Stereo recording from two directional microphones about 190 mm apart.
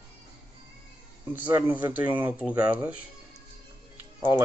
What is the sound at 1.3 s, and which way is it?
Speech, 10° right (ahead or behind).